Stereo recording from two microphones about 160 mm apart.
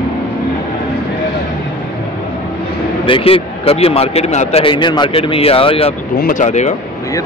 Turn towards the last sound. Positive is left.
turn(degrees=45)  # may be behind; listen again after turning